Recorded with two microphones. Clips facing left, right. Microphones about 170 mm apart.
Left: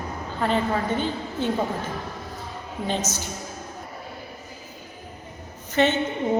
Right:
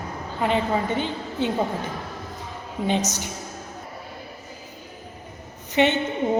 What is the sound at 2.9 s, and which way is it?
Speech, 15° right (ahead or behind).